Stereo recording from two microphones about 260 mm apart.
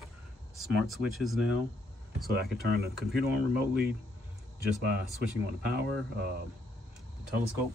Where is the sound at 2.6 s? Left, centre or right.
Right.